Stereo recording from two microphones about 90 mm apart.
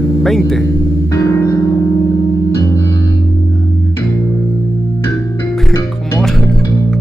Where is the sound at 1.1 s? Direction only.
35° left (ahead or behind).